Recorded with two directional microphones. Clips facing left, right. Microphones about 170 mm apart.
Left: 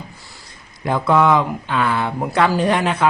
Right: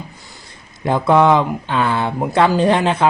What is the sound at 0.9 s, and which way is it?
Speech, 25° right (ahead or behind).